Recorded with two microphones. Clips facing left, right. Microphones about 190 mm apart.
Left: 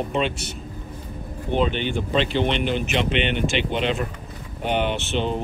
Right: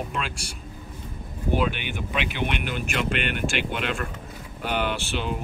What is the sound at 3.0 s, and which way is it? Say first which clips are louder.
Speech: left 4 dB; centre (ahead or behind).